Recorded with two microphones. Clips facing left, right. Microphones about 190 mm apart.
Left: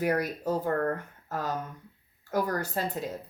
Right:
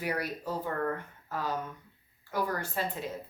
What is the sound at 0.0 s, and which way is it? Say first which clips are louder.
A woman's voice: left 6 dB; 45° left (ahead or behind).